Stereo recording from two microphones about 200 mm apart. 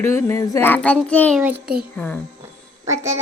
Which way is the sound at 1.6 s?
50° right (ahead or behind).